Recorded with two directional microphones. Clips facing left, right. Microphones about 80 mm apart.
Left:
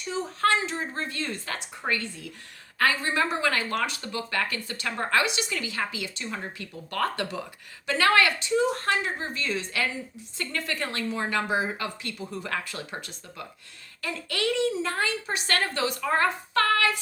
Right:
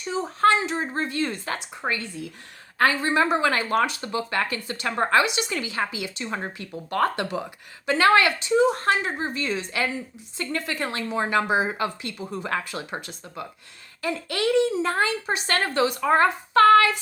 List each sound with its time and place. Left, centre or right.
0.1 s speech: right